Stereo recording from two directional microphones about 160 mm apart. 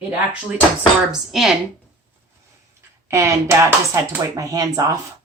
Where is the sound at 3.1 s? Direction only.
20° right (ahead or behind).